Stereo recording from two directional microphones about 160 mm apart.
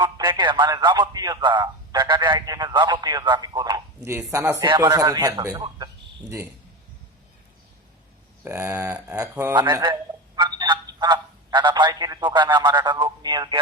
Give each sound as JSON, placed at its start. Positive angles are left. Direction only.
{"t": 0.0, "sound": "a man's voice", "side_deg": -30}
{"t": 8.4, "sound": "speech", "side_deg": -15}
{"t": 9.6, "sound": "speech", "side_deg": -25}